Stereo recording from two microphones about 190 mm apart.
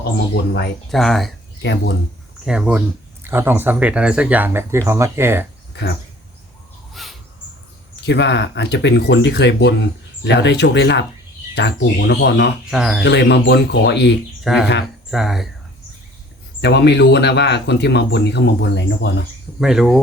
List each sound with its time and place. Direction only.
0.9 s speech: centre (ahead or behind)
1.6 s speech: 65° left (ahead or behind)
2.4 s speech: 5° right (ahead or behind)
5.7 s speech: 65° left (ahead or behind)
6.9 s bird: centre (ahead or behind)
8.0 s speech: 65° left (ahead or behind)
12.7 s speech: 5° right (ahead or behind)
13.1 s speech: 65° left (ahead or behind)
14.4 s speech: centre (ahead or behind)
16.6 s speech: 65° left (ahead or behind)
19.5 s speech: centre (ahead or behind)